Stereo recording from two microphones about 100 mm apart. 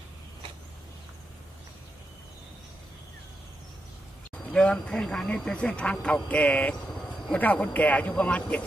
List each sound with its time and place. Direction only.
4.5 s speech: 10° left (ahead or behind)
6.9 s a sound: 5° left (ahead or behind)
7.3 s speech: 15° left (ahead or behind)